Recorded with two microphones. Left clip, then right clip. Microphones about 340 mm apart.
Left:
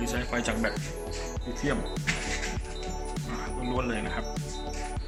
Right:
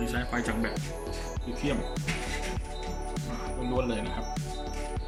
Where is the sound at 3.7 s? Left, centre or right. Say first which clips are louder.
Right 1 dB; centre.